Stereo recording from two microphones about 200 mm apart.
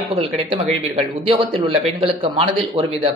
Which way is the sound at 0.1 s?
25° right (ahead or behind).